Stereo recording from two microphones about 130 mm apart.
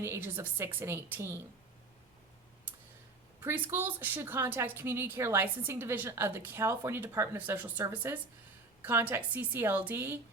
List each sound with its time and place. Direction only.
0.0 s a woman's voice: 20° right (ahead or behind)
3.4 s a woman's voice: 15° right (ahead or behind)